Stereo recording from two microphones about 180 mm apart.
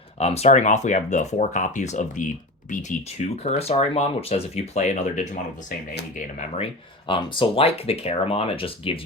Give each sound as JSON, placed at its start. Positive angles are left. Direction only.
{"t": 0.2, "sound": "speech", "side_deg": 35}
{"t": 7.1, "sound": "speech", "side_deg": 30}